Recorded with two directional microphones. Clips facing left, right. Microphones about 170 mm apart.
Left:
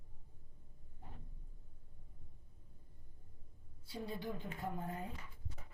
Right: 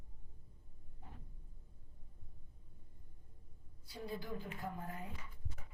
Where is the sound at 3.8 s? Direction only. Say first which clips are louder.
Left 2 dB; 25° left (ahead or behind).